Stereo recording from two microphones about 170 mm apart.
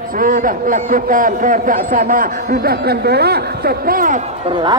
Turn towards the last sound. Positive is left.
turn(degrees=-55)  # may be behind; listen again after turning